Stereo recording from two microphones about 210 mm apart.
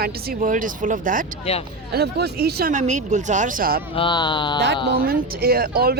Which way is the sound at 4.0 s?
20° left (ahead or behind).